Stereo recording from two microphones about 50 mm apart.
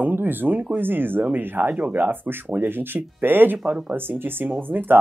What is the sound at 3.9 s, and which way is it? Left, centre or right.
Speech, right.